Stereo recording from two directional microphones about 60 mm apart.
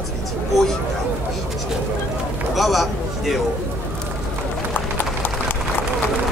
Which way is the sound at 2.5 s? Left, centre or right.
Centre.